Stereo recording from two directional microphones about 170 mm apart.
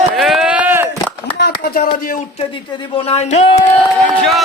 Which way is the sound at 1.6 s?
60° left (ahead or behind).